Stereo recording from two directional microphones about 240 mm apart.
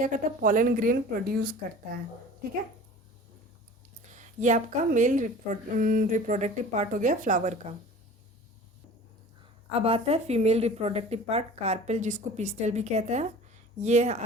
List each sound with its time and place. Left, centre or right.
0.0 s a woman's voice: right
4.1 s a woman's voice: right
9.8 s speech: right